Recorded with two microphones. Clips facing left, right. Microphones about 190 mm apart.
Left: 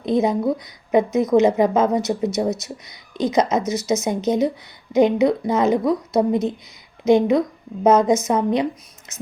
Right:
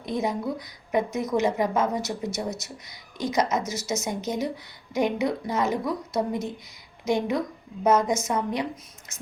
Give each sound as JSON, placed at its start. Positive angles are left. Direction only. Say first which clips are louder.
{"t": 0.0, "sound": "a woman's voice", "louder": "left 9 dB", "side_deg": 20}